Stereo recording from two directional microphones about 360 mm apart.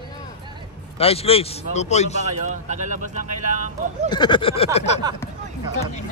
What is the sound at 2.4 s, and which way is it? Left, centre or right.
Speech, centre.